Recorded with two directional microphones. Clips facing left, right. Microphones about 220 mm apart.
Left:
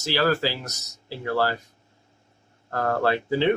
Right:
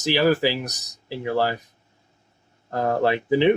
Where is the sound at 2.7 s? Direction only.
15° right (ahead or behind).